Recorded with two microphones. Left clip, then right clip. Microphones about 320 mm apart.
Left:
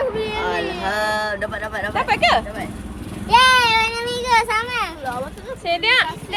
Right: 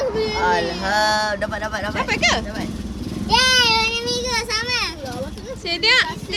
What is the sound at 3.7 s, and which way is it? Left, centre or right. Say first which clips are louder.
Child singing: left 1 dB; left.